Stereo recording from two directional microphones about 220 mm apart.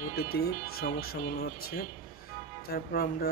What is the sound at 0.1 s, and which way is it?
Speech, 45° left (ahead or behind).